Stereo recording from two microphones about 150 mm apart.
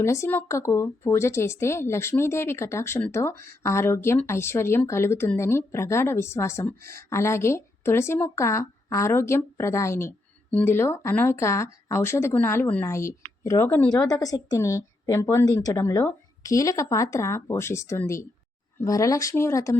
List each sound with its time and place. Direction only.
0.0 s a woman's voice: 20° left (ahead or behind)